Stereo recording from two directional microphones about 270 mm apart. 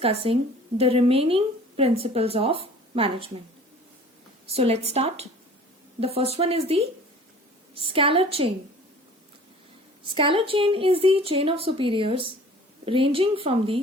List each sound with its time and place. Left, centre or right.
0.0 s speech: right
4.5 s speech: right
10.2 s speech: centre